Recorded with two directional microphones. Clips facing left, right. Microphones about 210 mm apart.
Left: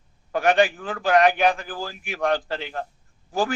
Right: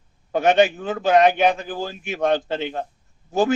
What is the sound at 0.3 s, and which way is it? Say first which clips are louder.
A man's voice: right 3 dB; 20° right (ahead or behind).